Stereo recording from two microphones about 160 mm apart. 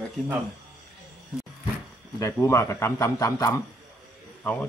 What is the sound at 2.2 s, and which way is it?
A man's voice, 15° left (ahead or behind).